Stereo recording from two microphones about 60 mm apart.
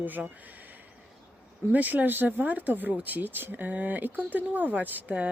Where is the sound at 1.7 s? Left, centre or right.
Right.